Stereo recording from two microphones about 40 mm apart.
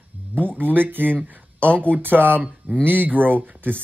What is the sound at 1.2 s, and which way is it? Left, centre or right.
A man's voice, right.